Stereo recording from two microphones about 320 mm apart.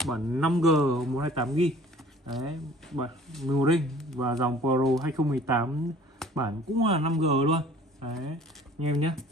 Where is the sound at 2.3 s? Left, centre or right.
Centre.